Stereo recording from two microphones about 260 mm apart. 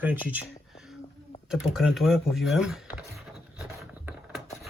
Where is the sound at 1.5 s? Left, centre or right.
Centre.